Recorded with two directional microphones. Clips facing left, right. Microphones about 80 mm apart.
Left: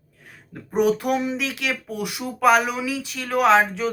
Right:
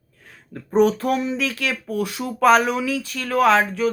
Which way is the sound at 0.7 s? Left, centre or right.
Centre.